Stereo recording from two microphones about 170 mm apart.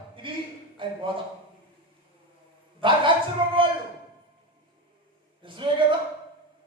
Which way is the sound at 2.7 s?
30° right (ahead or behind).